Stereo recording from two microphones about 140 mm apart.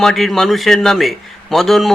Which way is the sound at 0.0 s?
Centre (ahead or behind).